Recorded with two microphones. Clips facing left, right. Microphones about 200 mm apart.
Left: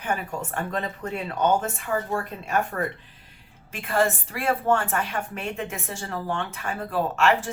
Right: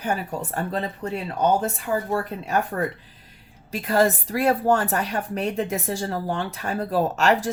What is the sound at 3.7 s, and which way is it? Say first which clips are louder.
A woman's voice: right 3 dB; 35° right (ahead or behind).